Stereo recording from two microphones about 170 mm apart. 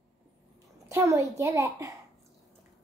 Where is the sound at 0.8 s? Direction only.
15° right (ahead or behind).